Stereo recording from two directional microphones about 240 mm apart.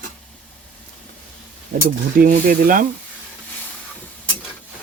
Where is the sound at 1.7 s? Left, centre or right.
Right.